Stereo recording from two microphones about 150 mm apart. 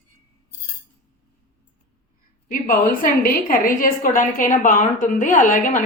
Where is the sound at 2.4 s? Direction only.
70° left (ahead or behind).